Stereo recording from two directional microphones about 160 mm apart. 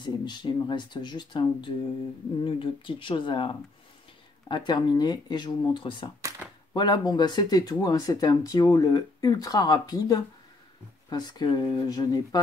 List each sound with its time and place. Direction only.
0.0 s speech: 30° left (ahead or behind)